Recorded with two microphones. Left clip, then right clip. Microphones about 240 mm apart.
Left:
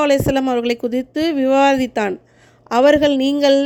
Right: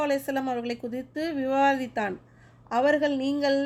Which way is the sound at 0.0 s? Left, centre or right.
Left.